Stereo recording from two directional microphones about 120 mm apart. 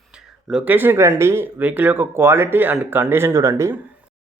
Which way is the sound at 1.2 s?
20° right (ahead or behind).